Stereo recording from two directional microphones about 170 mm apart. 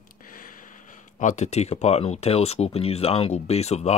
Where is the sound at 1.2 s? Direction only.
45° left (ahead or behind).